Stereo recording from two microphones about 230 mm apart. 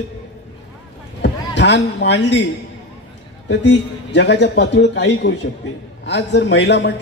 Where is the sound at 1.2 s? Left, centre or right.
Left.